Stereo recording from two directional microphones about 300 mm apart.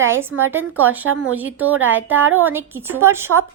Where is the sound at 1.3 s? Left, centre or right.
Centre.